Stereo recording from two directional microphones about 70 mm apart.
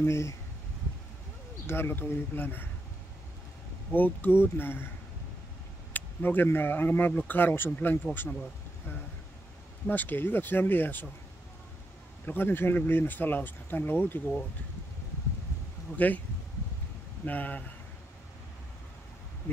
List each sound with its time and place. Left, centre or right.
0.0 s speech: left
1.7 s speech: left
3.9 s speech: left
5.9 s speech: left
9.8 s speech: left
12.3 s speech: left
16.0 s speech: left
17.2 s speech: left